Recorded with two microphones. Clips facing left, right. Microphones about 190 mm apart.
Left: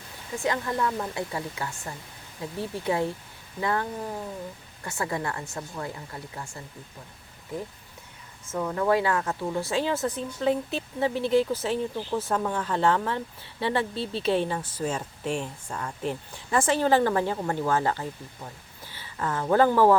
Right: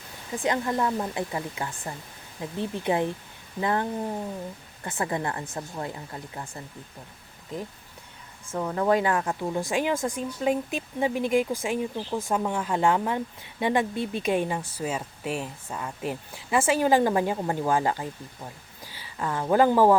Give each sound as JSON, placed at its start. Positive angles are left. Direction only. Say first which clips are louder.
{"t": 0.3, "sound": "speech", "louder": "right 2 dB", "side_deg": -20}
{"t": 6.3, "sound": "speech", "louder": "right 1 dB", "side_deg": -35}
{"t": 8.7, "sound": "speech", "louder": "right 1 dB", "side_deg": -20}